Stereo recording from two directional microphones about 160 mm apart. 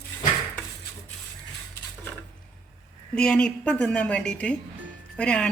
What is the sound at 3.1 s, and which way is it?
Speech, 5° left (ahead or behind).